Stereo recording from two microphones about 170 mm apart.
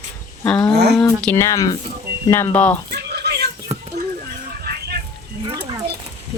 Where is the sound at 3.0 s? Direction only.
75° right (ahead or behind).